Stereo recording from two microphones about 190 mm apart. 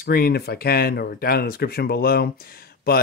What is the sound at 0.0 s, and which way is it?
A woman's voice, 55° left (ahead or behind).